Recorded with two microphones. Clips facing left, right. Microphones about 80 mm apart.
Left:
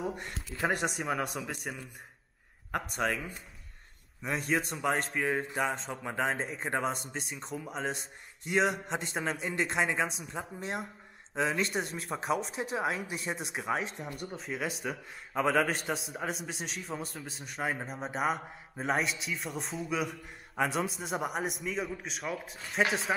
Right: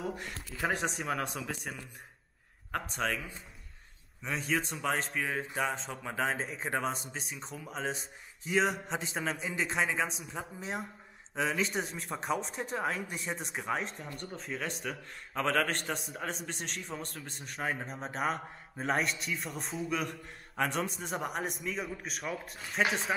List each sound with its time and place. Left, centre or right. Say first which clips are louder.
0.1 s speech: left 1 dB; centre
2.7 s a man's voice: left 2 dB; centre
4.2 s speech: left 2 dB; centre